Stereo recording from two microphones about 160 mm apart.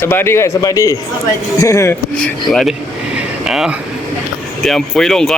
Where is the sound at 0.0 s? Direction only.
15° left (ahead or behind).